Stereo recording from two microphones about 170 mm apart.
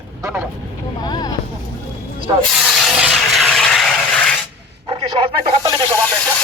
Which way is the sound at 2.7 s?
Centre (ahead or behind).